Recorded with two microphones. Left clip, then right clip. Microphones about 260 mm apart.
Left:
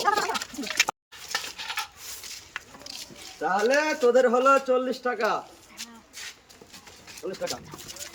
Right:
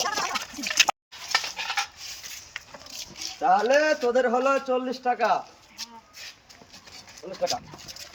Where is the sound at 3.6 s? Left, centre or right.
Centre.